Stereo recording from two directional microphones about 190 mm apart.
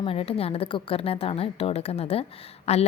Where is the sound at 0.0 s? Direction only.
30° left (ahead or behind).